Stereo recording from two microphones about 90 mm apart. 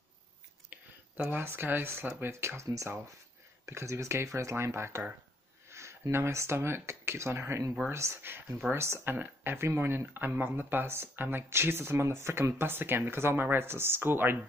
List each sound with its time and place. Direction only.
1.1 s speech: 20° right (ahead or behind)